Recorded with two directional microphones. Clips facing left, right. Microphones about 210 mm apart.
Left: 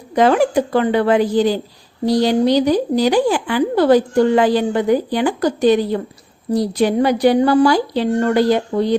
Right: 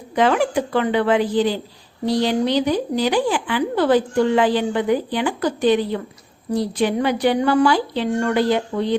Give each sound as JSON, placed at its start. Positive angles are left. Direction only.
{"t": 0.1, "sound": "speech", "side_deg": 40}